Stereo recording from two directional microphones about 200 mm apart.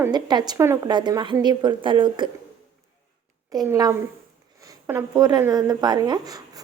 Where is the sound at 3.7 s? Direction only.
15° right (ahead or behind).